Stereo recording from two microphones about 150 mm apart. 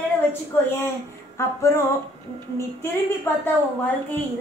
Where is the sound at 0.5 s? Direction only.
15° left (ahead or behind).